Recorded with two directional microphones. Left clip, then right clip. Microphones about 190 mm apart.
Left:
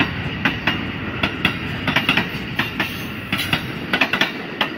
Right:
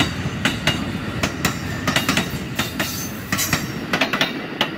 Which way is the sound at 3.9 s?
50° right (ahead or behind).